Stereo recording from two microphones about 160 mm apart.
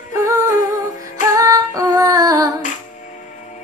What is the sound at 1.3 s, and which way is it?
Female singing, 20° right (ahead or behind).